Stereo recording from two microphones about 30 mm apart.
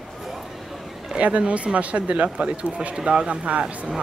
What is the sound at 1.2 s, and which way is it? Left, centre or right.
A woman's voice, right.